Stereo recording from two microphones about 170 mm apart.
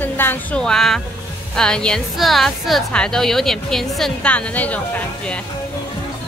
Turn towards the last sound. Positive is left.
turn(degrees=10)  # may be behind; listen again after turning